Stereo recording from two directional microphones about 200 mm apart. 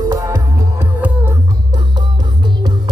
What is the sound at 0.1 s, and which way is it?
Music, 15° right (ahead or behind).